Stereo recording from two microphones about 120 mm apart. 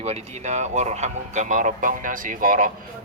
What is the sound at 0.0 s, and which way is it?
Speech, 70° right (ahead or behind).